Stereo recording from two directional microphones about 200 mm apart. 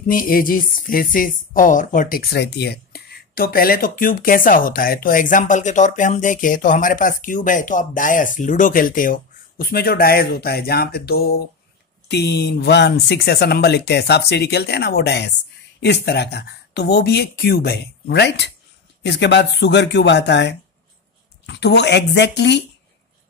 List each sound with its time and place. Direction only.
0.0 s speech: 45° left (ahead or behind)